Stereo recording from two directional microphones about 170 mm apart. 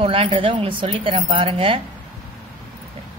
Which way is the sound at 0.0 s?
35° right (ahead or behind).